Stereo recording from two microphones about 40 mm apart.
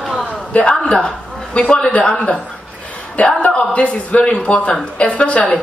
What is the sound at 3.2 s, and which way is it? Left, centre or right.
A woman's voice, left.